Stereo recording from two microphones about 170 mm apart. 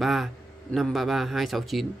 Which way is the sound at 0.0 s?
Centre (ahead or behind).